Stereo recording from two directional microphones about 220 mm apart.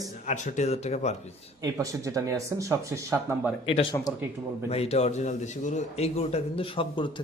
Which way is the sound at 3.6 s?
25° left (ahead or behind).